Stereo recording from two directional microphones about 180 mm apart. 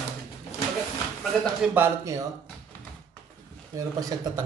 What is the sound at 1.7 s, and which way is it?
Speech, 15° right (ahead or behind).